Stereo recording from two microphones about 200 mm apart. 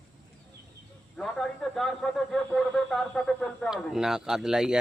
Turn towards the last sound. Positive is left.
turn(degrees=-5)  # may be behind; listen again after turning